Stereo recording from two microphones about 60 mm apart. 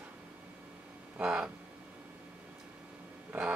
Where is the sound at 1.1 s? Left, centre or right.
Centre.